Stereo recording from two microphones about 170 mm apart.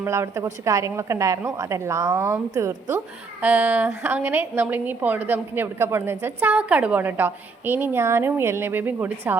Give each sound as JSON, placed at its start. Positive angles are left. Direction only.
{"t": 0.0, "sound": "a woman's voice", "side_deg": -15}